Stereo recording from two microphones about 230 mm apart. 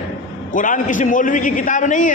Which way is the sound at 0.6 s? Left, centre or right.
Left.